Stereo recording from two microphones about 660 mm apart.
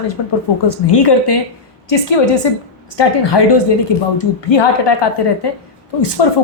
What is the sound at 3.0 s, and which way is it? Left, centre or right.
A woman's voice, left.